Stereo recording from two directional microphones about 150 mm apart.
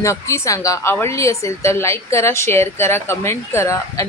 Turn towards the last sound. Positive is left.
turn(degrees=20)  # may be behind; listen again after turning